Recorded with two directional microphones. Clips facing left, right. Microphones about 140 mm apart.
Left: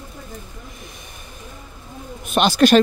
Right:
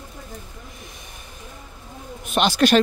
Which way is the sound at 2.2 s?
45° left (ahead or behind).